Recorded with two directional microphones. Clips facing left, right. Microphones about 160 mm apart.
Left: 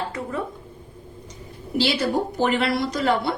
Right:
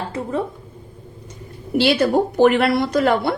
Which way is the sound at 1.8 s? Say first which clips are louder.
Right 6 dB; 60° right (ahead or behind).